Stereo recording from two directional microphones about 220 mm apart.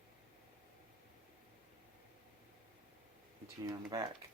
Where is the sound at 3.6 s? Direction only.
15° right (ahead or behind).